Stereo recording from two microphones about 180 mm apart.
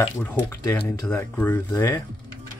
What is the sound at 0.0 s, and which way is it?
Speech, 10° left (ahead or behind).